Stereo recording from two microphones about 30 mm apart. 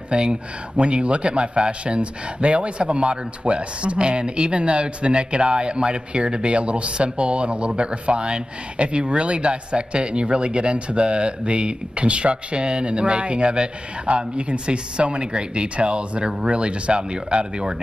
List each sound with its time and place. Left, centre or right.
0.1 s a man's voice: right